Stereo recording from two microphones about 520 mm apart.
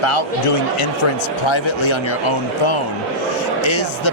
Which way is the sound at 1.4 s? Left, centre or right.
Left.